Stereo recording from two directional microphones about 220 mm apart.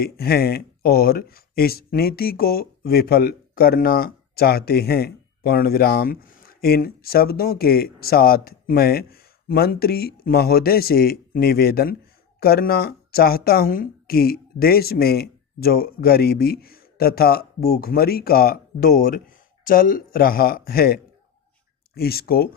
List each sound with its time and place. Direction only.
0.0 s speech: 45° left (ahead or behind)